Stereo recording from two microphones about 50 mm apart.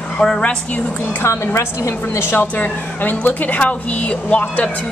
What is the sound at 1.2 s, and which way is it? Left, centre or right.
A woman's voice, left.